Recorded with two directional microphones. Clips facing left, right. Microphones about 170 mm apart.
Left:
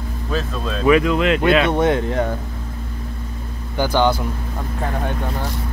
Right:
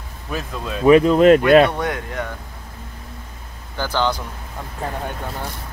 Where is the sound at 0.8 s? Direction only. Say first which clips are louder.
Right 5 dB; 35° right (ahead or behind).